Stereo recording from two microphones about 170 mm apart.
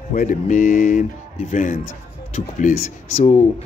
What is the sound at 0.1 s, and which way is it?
Speech, 50° left (ahead or behind).